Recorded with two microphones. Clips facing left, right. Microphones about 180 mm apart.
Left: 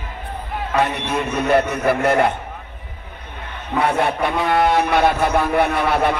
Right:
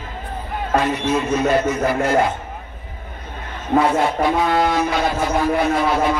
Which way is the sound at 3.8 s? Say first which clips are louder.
Right 1 dB; 60° left (ahead or behind).